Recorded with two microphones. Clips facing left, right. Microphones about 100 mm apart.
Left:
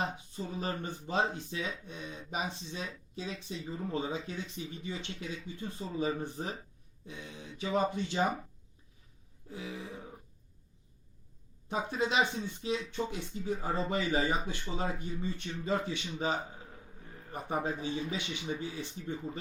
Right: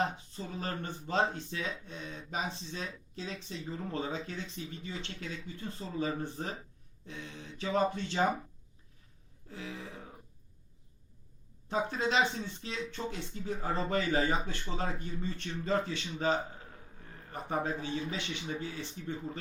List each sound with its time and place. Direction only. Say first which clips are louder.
0.3 s speech: left 4 dB; 15° left (ahead or behind)
9.5 s speech: left 1 dB; 15° left (ahead or behind)
11.7 s speech: right 1 dB; 15° left (ahead or behind)
17.3 s speech: even; 15° left (ahead or behind)